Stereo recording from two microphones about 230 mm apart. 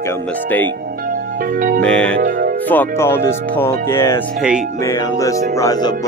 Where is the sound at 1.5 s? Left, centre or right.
Right.